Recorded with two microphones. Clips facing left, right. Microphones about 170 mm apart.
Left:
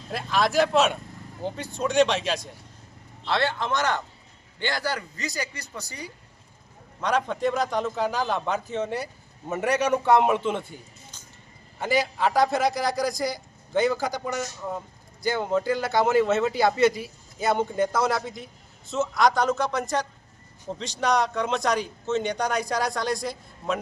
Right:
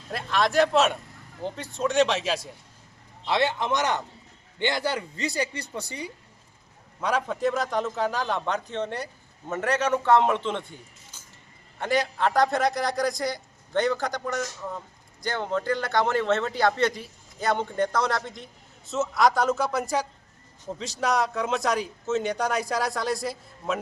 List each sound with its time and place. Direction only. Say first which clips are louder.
0.1 s speech: even; centre (ahead or behind)
3.2 s speech: right 1 dB; 15° right (ahead or behind)
7.0 s speech: left 1 dB; 5° right (ahead or behind)
11.8 s speech: left 1 dB; 5° left (ahead or behind)